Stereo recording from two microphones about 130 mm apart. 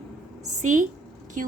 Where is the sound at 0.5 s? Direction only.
70° right (ahead or behind).